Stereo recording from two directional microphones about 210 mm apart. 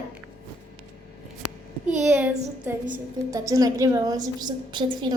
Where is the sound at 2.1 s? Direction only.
5° right (ahead or behind).